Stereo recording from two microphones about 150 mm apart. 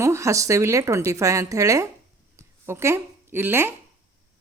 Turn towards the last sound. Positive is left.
turn(degrees=-15)  # may be behind; listen again after turning